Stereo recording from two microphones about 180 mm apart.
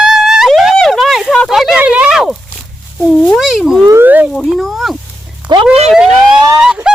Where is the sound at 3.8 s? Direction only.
15° right (ahead or behind).